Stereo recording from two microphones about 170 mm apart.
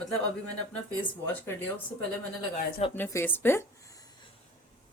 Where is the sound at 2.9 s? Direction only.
15° left (ahead or behind).